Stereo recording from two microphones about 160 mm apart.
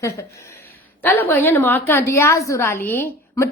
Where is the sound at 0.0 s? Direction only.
20° left (ahead or behind).